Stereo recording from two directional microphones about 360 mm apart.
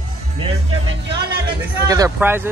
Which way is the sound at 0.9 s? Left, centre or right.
Right.